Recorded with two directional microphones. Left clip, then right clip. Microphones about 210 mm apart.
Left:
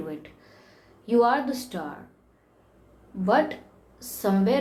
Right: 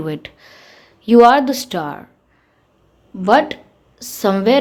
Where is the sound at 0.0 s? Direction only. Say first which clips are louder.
Right 11 dB; 45° right (ahead or behind).